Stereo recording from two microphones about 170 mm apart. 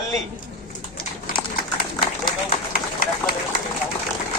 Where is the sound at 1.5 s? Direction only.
55° left (ahead or behind).